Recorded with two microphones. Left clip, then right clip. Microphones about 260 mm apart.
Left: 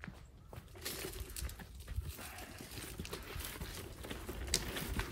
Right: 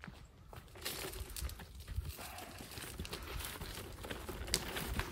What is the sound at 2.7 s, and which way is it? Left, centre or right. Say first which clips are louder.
Clip-clop: even; centre.